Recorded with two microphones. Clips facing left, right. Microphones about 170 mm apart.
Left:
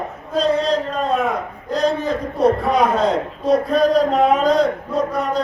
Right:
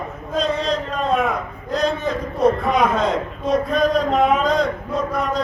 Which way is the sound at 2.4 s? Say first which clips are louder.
Left 1 dB; 35° left (ahead or behind).